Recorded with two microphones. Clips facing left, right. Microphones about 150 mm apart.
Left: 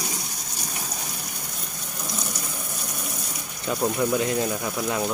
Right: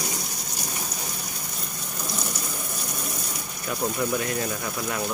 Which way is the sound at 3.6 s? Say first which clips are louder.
Left 3 dB; 10° left (ahead or behind).